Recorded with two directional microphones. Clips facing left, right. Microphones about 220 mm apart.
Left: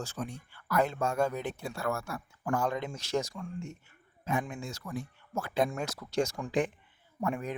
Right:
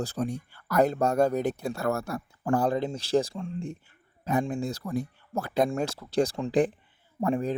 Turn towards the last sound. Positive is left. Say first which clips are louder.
# right 6 dB
turn(degrees=-30)  # may be behind; listen again after turning